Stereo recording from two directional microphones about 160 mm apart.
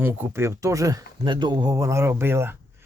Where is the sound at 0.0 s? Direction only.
15° right (ahead or behind).